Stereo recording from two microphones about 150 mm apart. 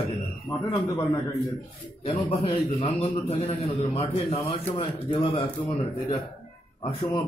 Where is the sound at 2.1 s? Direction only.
40° left (ahead or behind).